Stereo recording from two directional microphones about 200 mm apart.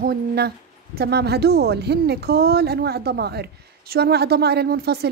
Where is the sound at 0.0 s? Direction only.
50° right (ahead or behind).